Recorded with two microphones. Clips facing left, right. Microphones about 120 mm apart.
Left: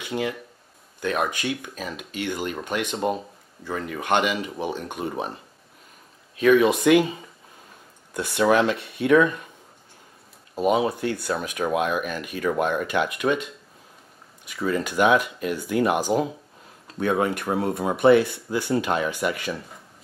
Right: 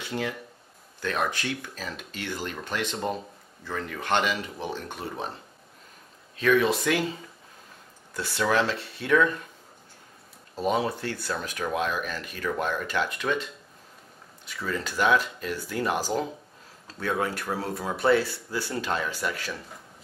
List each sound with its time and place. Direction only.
0.0 s speech: 5° left (ahead or behind)
6.3 s speech: 10° left (ahead or behind)
10.5 s speech: 10° left (ahead or behind)
14.5 s speech: 10° left (ahead or behind)
17.0 s speech: 15° left (ahead or behind)